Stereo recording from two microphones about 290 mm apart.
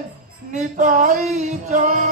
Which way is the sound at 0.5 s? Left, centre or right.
Right.